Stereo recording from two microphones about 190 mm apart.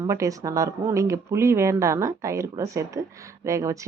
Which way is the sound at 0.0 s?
15° right (ahead or behind).